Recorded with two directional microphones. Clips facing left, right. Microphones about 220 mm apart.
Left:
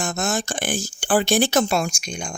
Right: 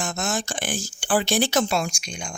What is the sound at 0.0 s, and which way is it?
Speech, 50° left (ahead or behind).